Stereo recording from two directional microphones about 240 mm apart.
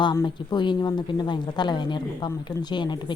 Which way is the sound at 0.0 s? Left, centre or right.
Centre.